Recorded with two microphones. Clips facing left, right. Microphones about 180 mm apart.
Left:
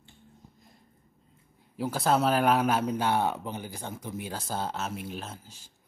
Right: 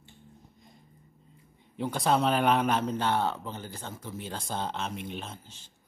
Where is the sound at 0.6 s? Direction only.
Centre (ahead or behind).